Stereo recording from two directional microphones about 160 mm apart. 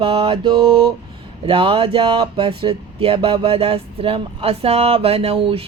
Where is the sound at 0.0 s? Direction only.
35° right (ahead or behind).